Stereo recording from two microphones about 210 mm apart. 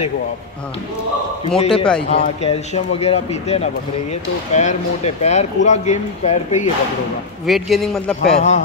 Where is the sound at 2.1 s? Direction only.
30° left (ahead or behind).